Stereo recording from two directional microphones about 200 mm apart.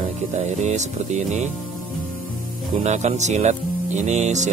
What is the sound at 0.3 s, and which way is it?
Speech, 35° right (ahead or behind).